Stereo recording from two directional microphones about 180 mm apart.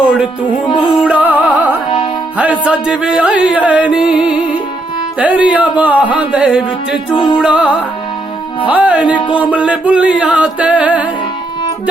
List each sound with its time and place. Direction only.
0.0 s music: 5° right (ahead or behind)
5.2 s speech: 10° right (ahead or behind)
7.1 s music: 25° left (ahead or behind)
7.3 s speech: 5° right (ahead or behind)